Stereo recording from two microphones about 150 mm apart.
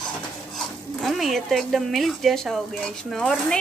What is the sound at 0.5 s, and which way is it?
Speech, centre (ahead or behind).